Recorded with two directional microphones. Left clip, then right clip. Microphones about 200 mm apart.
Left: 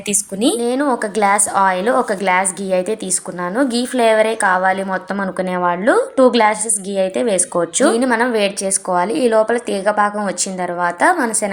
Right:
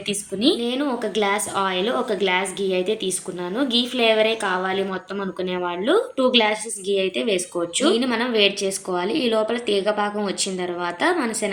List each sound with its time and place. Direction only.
0.1 s a woman's voice: 20° left (ahead or behind)
0.6 s a woman's voice: 30° left (ahead or behind)